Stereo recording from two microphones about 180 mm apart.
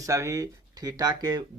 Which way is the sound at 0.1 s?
15° right (ahead or behind).